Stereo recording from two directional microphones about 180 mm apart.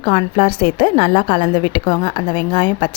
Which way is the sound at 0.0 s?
30° left (ahead or behind).